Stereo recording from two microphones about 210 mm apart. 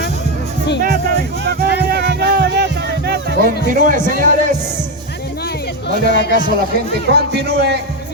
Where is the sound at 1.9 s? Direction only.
50° right (ahead or behind).